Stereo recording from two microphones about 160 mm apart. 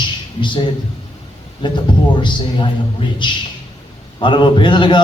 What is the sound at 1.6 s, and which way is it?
A man's voice, 30° left (ahead or behind).